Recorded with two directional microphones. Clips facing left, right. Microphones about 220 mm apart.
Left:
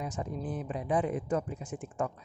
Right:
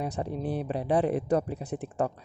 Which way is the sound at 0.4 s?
70° right (ahead or behind).